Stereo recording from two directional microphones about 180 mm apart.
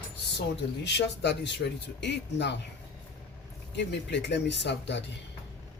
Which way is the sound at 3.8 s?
75° left (ahead or behind).